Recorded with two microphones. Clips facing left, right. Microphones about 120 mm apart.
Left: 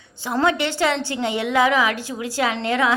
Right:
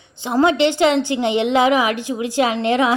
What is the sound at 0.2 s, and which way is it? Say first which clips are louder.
A woman's voice: right 5 dB; 20° right (ahead or behind).